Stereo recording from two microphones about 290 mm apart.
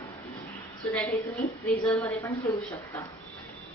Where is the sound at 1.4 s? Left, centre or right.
Left.